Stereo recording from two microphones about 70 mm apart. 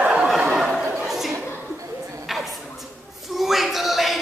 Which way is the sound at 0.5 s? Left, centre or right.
Centre.